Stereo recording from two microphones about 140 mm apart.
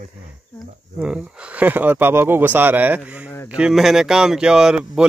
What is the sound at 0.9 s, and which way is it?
Speech, 5° right (ahead or behind).